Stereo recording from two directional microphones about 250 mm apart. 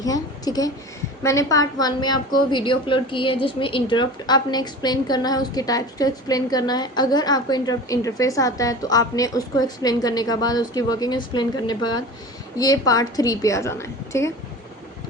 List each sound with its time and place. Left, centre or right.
0.0 s a woman's voice: centre